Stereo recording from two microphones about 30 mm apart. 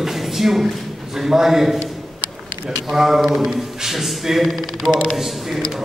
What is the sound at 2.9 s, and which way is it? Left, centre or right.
A man's voice, centre.